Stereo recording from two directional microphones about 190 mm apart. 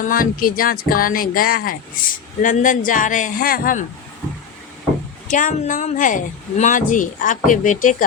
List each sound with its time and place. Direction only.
0.0 s speech: 45° left (ahead or behind)
5.3 s speech: 45° left (ahead or behind)